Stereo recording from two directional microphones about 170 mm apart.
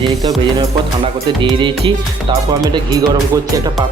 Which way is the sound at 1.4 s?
30° right (ahead or behind).